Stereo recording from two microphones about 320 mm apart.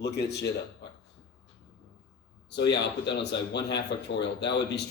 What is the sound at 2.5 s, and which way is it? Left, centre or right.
Speech, left.